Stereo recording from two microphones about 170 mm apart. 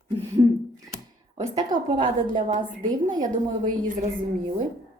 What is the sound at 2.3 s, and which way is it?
A woman's voice, 45° right (ahead or behind).